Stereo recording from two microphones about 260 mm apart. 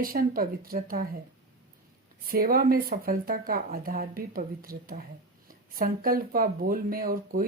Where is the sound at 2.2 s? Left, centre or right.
Right.